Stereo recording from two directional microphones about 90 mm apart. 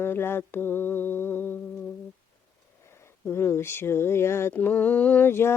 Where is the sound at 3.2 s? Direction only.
30° left (ahead or behind).